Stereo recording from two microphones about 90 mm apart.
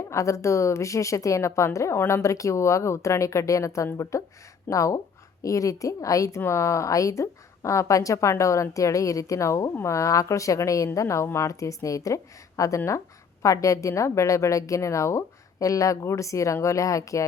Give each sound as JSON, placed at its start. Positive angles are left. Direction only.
{"t": 0.1, "sound": "a woman's voice", "side_deg": 35}